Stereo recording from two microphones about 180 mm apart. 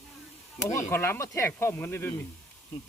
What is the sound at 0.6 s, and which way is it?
Speech, 15° left (ahead or behind).